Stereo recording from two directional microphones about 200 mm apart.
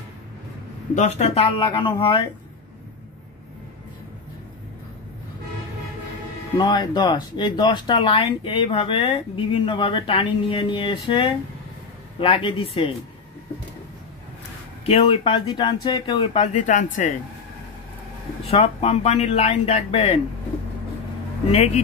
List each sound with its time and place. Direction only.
0.9 s speech: 35° left (ahead or behind)
6.6 s speech: 20° left (ahead or behind)
14.9 s speech: 30° left (ahead or behind)
16.5 s speech: 40° left (ahead or behind)
18.5 s speech: 30° left (ahead or behind)
21.5 s speech: 30° left (ahead or behind)